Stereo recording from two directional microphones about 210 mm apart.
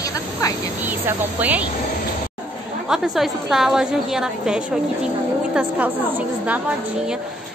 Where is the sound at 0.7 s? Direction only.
10° right (ahead or behind).